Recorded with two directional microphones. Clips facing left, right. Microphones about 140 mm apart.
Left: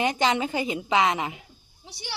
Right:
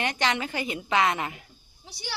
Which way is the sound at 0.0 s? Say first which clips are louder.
Left 4 dB; 25° left (ahead or behind).